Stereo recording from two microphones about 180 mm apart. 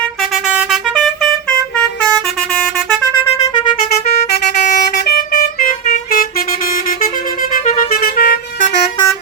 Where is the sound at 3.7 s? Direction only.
55° left (ahead or behind).